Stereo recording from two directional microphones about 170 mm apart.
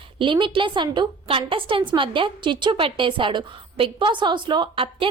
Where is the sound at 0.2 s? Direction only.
30° right (ahead or behind).